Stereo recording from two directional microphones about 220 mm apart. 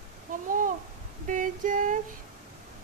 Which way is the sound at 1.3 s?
35° right (ahead or behind).